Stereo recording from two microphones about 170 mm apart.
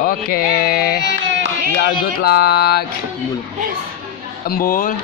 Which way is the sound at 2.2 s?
70° left (ahead or behind).